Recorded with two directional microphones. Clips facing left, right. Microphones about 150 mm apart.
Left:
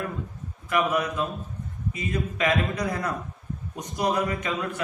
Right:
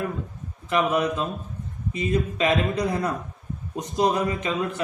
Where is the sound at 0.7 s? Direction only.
25° right (ahead or behind).